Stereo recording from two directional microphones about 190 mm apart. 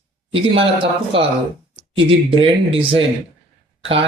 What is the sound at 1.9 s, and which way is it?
Speech, 25° right (ahead or behind).